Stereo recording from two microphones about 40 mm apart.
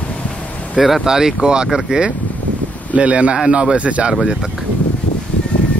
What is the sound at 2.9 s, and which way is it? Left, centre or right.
Speech, right.